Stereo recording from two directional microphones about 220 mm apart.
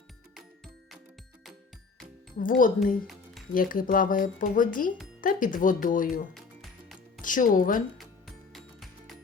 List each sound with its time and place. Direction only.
0.3 s music: centre (ahead or behind)
2.4 s speech: 40° left (ahead or behind)
6.3 s music: centre (ahead or behind)
7.2 s speech: 35° left (ahead or behind)
8.5 s music: centre (ahead or behind)